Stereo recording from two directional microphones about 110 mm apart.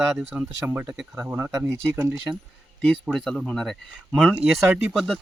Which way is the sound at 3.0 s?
Centre (ahead or behind).